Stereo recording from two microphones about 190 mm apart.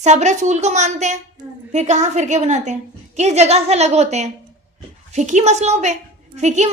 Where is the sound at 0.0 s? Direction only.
35° right (ahead or behind).